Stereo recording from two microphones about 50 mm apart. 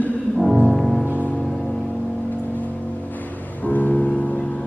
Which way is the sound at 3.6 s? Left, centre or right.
Left.